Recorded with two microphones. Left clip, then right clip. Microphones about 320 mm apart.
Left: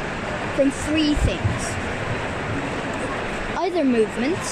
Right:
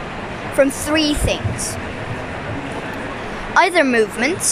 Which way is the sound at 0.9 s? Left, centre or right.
Centre.